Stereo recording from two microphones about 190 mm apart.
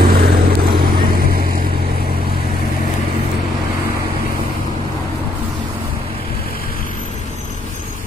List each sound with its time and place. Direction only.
0.0 s vehicle: 50° right (ahead or behind)